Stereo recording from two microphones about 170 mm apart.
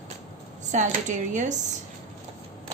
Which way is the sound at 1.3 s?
45° right (ahead or behind).